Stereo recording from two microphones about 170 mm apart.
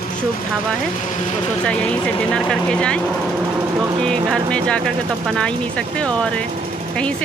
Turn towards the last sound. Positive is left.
turn(degrees=5)  # may be behind; listen again after turning